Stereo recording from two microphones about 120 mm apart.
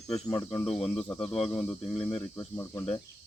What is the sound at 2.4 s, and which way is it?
Speech, 30° left (ahead or behind).